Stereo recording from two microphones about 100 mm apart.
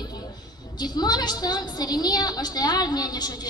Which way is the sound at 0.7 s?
45° left (ahead or behind).